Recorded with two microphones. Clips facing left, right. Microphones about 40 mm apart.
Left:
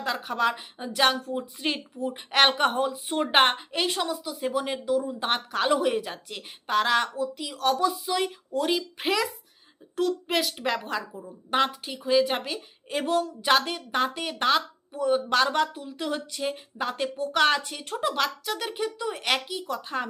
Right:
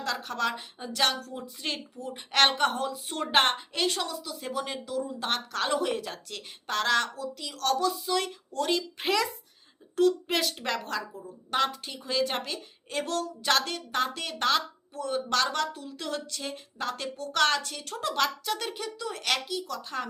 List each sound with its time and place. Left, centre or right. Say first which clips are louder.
0.0 s a woman's voice: left 4 dB; centre
18.1 s speech: right 4 dB; centre
18.7 s speech: left 5 dB; left